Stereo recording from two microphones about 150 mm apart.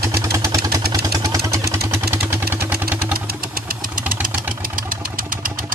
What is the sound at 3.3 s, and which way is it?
Vehicle, 75° right (ahead or behind).